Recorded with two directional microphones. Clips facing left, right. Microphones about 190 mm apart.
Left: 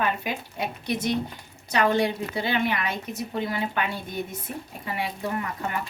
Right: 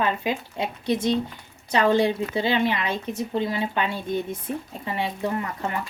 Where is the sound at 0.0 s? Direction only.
25° right (ahead or behind).